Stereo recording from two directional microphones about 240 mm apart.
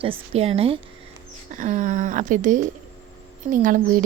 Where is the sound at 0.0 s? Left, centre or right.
Right.